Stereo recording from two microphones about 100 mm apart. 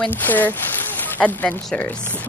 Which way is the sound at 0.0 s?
20° left (ahead or behind).